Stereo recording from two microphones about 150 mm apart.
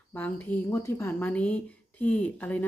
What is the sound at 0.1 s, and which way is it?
Speech, 10° left (ahead or behind).